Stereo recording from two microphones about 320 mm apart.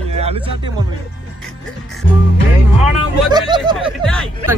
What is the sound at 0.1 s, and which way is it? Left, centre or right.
Music, centre.